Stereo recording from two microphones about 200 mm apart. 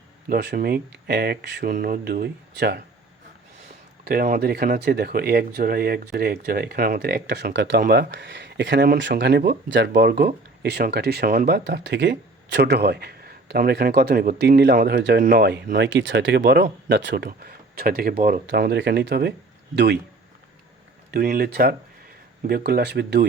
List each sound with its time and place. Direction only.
0.3 s speech: 50° right (ahead or behind)
4.0 s speech: 50° right (ahead or behind)
18.4 s speech: 55° right (ahead or behind)
21.1 s speech: 45° right (ahead or behind)